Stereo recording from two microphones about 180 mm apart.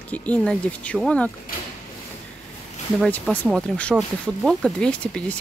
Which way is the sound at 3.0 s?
5° left (ahead or behind).